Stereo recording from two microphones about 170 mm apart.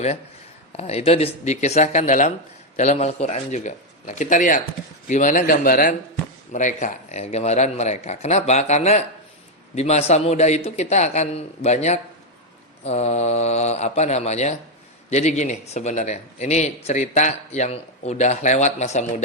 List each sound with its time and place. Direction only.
0.8 s a man's voice: 40° left (ahead or behind)